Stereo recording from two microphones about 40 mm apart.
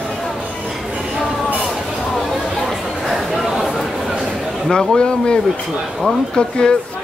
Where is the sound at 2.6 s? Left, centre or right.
Centre.